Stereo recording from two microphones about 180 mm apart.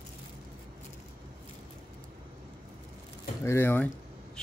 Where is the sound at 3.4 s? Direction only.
15° left (ahead or behind).